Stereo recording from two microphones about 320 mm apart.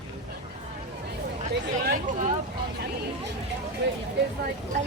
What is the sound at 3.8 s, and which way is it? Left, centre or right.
Speech, right.